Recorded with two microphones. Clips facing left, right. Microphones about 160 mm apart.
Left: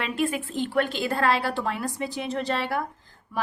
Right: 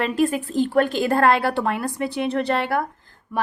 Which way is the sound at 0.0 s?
40° right (ahead or behind).